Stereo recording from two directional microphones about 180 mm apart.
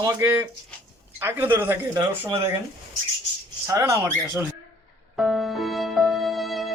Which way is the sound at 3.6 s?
15° right (ahead or behind).